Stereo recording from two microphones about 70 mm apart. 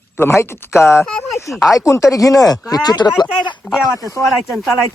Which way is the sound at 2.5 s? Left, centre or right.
Left.